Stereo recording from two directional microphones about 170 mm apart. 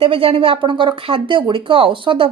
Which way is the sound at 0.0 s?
35° right (ahead or behind).